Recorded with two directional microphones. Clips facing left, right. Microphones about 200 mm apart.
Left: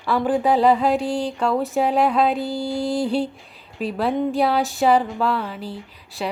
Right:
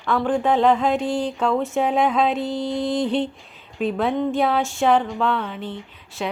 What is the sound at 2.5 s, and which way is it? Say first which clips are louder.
Mantra: even; 30° left (ahead or behind).